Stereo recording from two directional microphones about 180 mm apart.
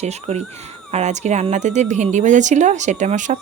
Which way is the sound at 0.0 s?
35° right (ahead or behind).